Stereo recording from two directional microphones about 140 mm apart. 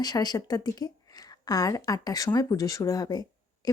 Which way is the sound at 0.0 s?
30° left (ahead or behind).